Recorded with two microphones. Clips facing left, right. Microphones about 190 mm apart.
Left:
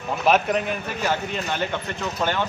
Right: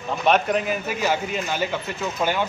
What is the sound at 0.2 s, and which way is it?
A man's voice, centre (ahead or behind).